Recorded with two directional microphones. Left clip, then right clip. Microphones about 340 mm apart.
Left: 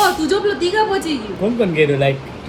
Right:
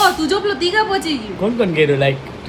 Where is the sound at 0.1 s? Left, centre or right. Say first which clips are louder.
Even; centre.